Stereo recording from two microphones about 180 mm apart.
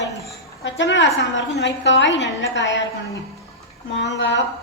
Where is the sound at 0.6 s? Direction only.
85° left.